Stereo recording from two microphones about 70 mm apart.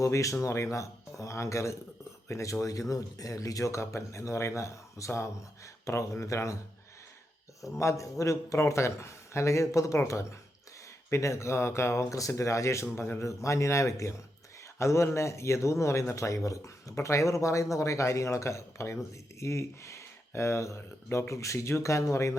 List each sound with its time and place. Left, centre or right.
0.0 s speech: left
7.6 s speech: left